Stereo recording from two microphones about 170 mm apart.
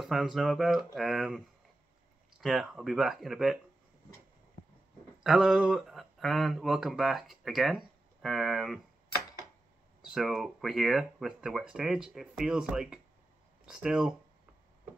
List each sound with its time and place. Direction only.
0.0 s speech: centre (ahead or behind)
2.4 s speech: centre (ahead or behind)
5.2 s speech: centre (ahead or behind)
10.0 s speech: centre (ahead or behind)